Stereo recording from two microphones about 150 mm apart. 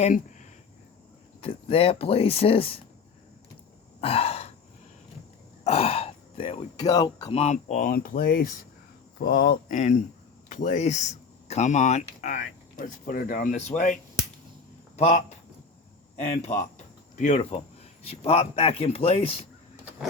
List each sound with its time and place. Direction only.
0.0 s speech: 55° left (ahead or behind)
1.4 s speech: 40° left (ahead or behind)
4.0 s throat clearing: 40° left (ahead or behind)
5.6 s throat clearing: 40° left (ahead or behind)
6.7 s speech: 25° left (ahead or behind)
7.3 s speech: 50° left (ahead or behind)
16.1 s speech: 50° left (ahead or behind)
16.7 s cricket: 50° left (ahead or behind)
18.0 s speech: 40° left (ahead or behind)